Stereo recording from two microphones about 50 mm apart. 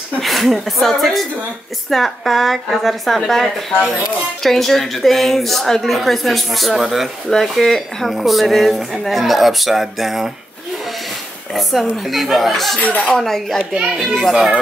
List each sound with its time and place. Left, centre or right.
0.2 s a woman's voice: centre
11.5 s a woman's voice: centre
12.8 s speech: left
13.1 s a woman's voice: centre